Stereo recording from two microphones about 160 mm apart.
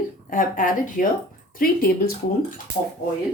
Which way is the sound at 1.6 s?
70° left (ahead or behind).